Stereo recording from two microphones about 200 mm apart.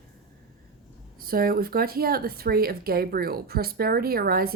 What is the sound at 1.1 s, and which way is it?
Speech, 45° right (ahead or behind).